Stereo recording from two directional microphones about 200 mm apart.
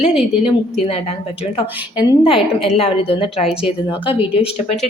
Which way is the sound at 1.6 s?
25° left (ahead or behind).